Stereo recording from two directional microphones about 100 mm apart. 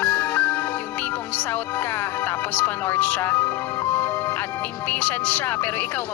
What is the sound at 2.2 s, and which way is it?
Speech, 20° left (ahead or behind).